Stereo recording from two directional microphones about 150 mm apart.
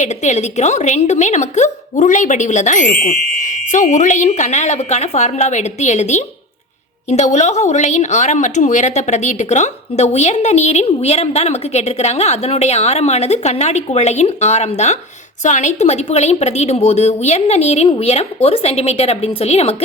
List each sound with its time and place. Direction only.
0.0 s a woman's voice: 50° left (ahead or behind)